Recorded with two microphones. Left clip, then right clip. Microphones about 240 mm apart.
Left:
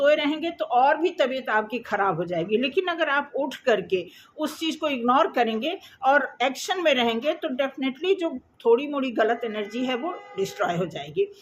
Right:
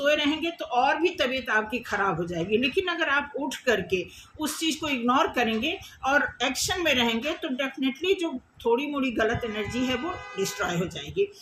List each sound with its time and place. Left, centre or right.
0.0 s a woman's voice: centre